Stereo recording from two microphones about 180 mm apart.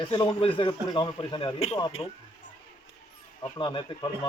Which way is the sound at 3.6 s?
25° left (ahead or behind).